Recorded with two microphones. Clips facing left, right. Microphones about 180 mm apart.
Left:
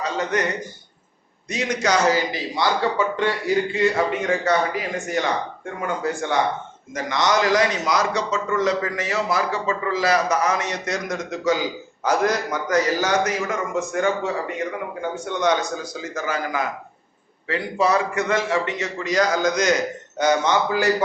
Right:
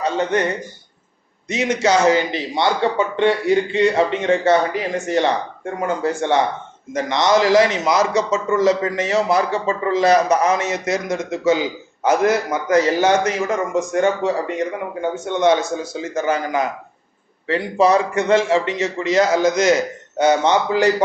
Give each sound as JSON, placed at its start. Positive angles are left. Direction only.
{"t": 0.0, "sound": "speech", "side_deg": -30}
{"t": 1.5, "sound": "a man's voice", "side_deg": -25}